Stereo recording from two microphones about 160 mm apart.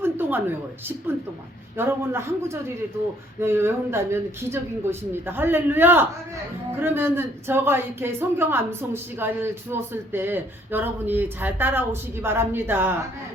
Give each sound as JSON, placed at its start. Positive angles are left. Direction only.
{"t": 0.0, "sound": "a woman's voice", "side_deg": -15}